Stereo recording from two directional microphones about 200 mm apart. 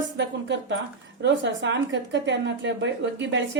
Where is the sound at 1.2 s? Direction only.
65° right (ahead or behind).